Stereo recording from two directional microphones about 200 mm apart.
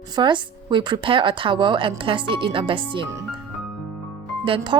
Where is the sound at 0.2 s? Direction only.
25° right (ahead or behind).